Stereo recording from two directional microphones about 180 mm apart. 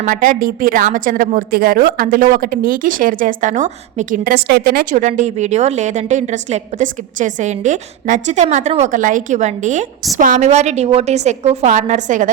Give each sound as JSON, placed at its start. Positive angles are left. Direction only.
{"t": 0.0, "sound": "a woman's voice", "side_deg": -50}